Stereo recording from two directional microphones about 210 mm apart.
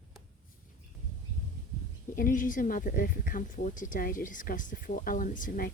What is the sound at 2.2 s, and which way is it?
Speech, 40° left (ahead or behind).